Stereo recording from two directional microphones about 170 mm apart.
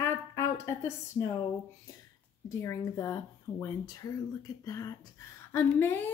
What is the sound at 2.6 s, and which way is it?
Speech, 15° left (ahead or behind).